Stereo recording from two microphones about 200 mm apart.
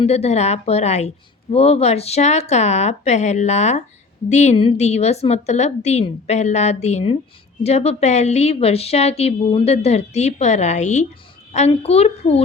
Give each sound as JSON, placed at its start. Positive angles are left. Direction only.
{"t": 0.0, "sound": "a woman's voice", "side_deg": 30}